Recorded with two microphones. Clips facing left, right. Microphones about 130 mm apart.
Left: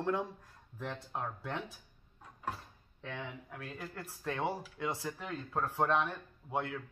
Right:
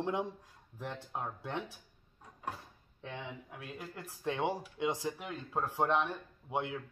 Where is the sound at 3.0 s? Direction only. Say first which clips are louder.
Even; 15° right (ahead or behind).